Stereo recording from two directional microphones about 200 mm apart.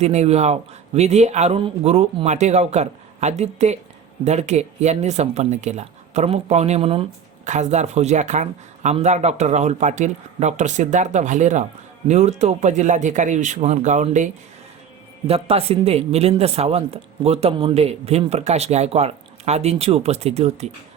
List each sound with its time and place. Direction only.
0.0 s speech: 35° right (ahead or behind)
15.3 s speech: 30° right (ahead or behind)